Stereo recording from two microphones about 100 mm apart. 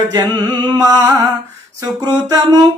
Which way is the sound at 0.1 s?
45° right (ahead or behind).